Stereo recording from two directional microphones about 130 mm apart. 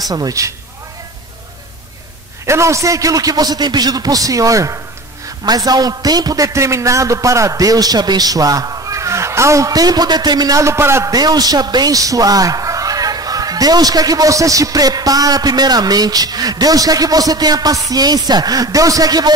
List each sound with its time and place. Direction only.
0.1 s a man's voice: 25° right (ahead or behind)
2.4 s a man's voice: 20° right (ahead or behind)